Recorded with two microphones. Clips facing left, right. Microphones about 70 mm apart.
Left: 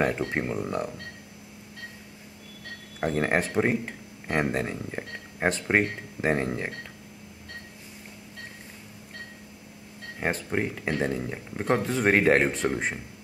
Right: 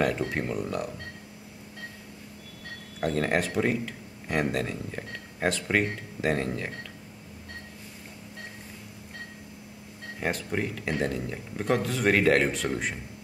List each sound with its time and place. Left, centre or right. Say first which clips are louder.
0.3 s speech: left 1 dB; left
3.0 s speech: left 1 dB; left
10.2 s speech: left 2 dB; left